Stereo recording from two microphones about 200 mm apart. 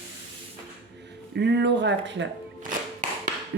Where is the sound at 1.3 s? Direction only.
60° right (ahead or behind).